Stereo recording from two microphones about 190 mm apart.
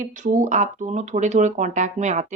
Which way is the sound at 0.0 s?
40° right (ahead or behind).